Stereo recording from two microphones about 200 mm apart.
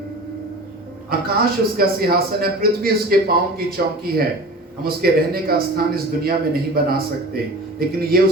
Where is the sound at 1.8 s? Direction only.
50° right (ahead or behind).